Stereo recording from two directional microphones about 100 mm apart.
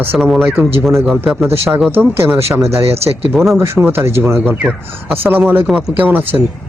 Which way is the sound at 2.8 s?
85° right.